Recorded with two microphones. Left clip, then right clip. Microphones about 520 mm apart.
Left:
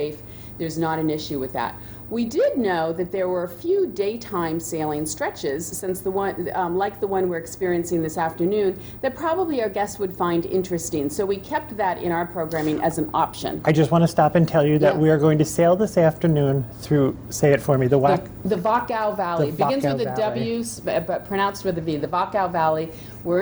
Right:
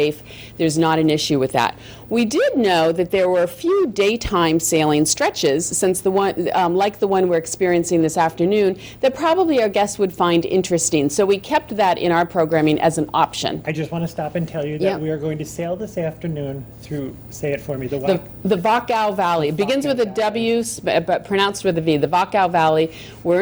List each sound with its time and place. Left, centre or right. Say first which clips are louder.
0.6 s a woman's voice: right 7 dB; right
13.1 s speech: right 4 dB; right
13.7 s speech: left 7 dB; left
18.0 s speech: left 1 dB; right